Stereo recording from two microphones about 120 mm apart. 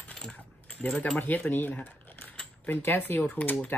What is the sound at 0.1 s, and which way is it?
Coin, 10° left (ahead or behind).